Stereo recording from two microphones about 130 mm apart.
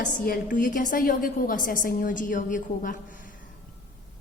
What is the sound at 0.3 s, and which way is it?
A woman's voice, 90° left.